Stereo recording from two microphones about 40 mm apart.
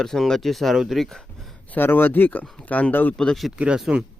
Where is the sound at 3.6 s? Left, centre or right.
Right.